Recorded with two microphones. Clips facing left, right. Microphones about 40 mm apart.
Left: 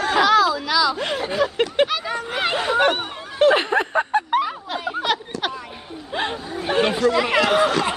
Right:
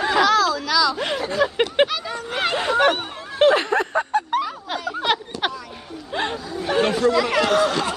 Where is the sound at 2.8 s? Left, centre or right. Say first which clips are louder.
Even; centre.